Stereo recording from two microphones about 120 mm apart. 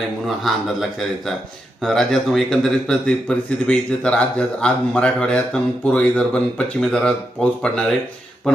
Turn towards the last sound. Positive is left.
turn(degrees=5)  # may be behind; listen again after turning